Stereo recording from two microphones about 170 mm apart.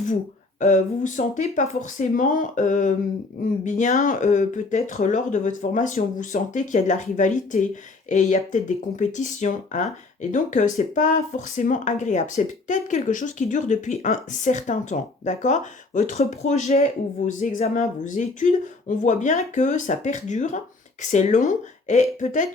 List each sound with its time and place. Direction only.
0.6 s speech: 45° left (ahead or behind)